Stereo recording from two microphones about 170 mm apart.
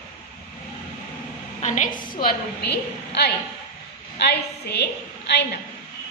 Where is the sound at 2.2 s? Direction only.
60° left (ahead or behind).